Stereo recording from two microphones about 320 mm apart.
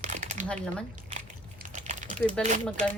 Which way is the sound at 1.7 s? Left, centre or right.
Right.